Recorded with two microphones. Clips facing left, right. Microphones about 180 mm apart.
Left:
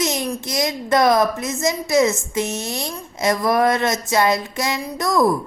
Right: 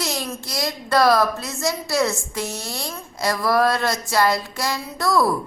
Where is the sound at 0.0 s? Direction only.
20° left (ahead or behind).